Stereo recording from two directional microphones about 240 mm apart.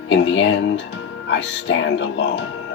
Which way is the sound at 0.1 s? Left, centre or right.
Left.